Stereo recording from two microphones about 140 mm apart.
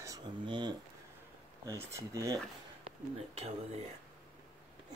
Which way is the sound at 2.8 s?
45° right (ahead or behind).